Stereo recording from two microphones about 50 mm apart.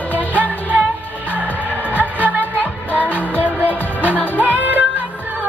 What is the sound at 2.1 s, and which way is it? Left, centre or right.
Music, right.